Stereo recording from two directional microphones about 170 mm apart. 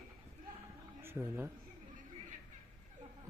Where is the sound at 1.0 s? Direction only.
10° right (ahead or behind).